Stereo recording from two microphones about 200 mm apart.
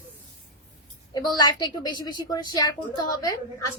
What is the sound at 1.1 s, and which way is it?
A woman's voice, 20° left (ahead or behind).